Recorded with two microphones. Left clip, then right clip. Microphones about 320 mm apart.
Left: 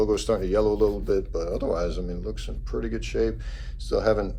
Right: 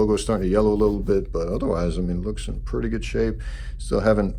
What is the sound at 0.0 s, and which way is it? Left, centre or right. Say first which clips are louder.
Speech: right 2 dB; right.